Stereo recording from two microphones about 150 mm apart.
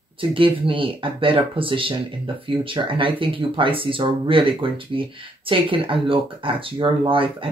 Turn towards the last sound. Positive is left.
turn(degrees=-35)  # may be behind; listen again after turning